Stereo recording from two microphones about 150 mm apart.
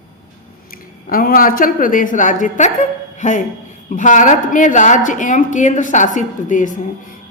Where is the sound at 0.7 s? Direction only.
75° left (ahead or behind).